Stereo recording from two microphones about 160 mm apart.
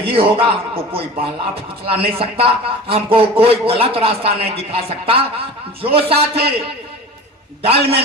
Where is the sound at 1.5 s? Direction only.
35° right (ahead or behind).